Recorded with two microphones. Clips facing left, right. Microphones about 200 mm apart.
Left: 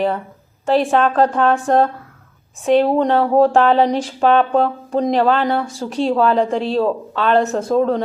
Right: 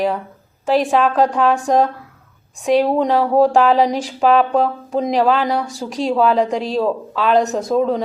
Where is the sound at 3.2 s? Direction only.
10° right (ahead or behind).